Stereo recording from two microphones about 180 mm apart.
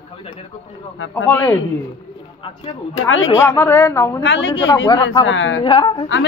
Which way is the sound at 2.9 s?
90° left.